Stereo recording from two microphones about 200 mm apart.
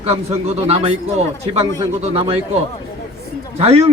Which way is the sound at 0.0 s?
30° right (ahead or behind).